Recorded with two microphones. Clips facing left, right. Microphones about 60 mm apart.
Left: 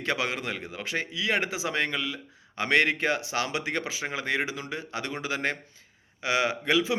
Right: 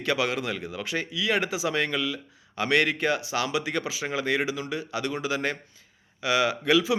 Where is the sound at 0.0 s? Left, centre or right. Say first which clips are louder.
Right 3 dB; left.